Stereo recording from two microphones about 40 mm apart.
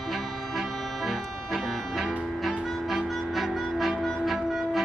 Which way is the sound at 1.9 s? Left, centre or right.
Centre.